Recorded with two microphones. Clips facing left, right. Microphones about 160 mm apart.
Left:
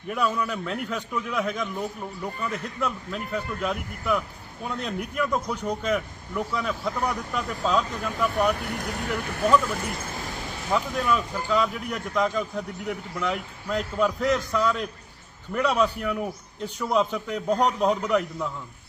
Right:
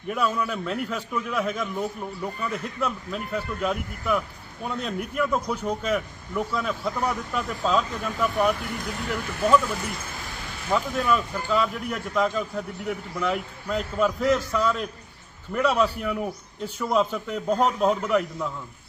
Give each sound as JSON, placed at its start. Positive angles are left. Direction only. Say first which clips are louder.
{"t": 0.1, "sound": "speech", "louder": "even", "side_deg": 0}
{"t": 8.6, "sound": "speech", "louder": "left 1 dB", "side_deg": 60}
{"t": 9.0, "sound": "speech", "louder": "right 1 dB", "side_deg": 0}
{"t": 10.7, "sound": "speech", "louder": "right 1 dB", "side_deg": 0}